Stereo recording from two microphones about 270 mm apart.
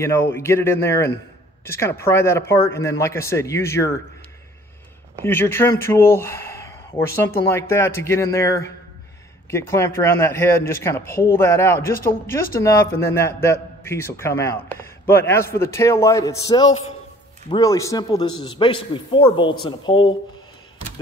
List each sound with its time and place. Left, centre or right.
0.0 s a man's voice: centre
5.2 s a man's voice: centre